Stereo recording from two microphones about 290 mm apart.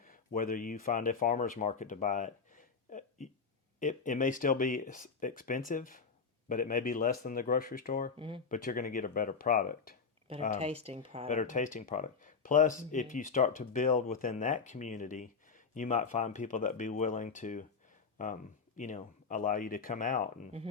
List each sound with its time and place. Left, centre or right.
0.0 s speech: left
8.1 s speech: centre
8.4 s speech: left
10.6 s speech: right
11.3 s speech: left